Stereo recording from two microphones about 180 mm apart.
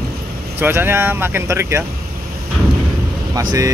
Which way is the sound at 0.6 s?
15° right (ahead or behind).